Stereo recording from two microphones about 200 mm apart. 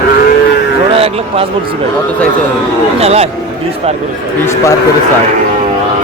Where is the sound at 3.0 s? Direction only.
30° right (ahead or behind).